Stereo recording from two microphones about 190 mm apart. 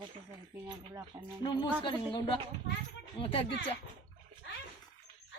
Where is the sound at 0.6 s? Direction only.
20° right (ahead or behind).